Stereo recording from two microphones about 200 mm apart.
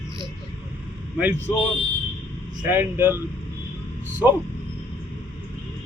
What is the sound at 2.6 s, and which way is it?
Speech, 10° right (ahead or behind).